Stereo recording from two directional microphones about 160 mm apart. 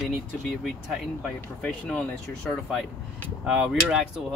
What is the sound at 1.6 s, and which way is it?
Speech, 5° left (ahead or behind).